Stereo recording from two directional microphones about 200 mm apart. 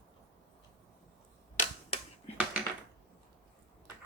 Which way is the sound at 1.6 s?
30° left (ahead or behind).